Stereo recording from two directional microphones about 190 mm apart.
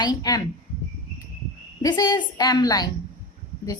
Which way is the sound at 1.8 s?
20° left (ahead or behind).